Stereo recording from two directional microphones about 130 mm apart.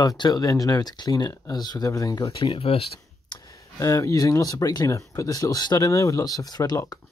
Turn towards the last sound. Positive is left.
turn(degrees=30)  # may be behind; listen again after turning